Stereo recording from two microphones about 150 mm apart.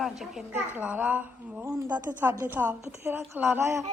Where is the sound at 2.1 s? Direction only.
10° right (ahead or behind).